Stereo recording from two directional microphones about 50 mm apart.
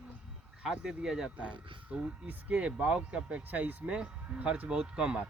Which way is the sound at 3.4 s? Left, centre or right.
Right.